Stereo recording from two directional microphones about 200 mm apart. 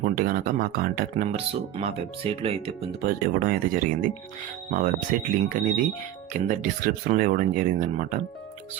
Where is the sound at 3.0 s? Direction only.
45° right (ahead or behind).